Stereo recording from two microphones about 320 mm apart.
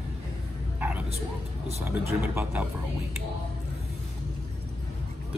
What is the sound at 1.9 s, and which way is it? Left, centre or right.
Speech, centre.